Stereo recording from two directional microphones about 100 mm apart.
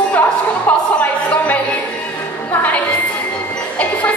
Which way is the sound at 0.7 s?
15° left (ahead or behind).